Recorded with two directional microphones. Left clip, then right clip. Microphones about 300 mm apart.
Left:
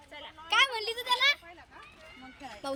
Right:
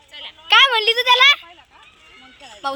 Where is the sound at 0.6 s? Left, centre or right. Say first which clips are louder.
Right 16 dB; centre.